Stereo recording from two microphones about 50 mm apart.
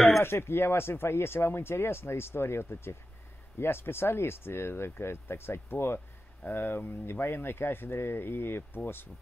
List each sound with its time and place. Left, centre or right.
0.2 s speech: left